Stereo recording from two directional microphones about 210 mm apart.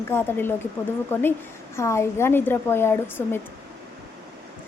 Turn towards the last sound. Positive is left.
turn(degrees=10)  # may be behind; listen again after turning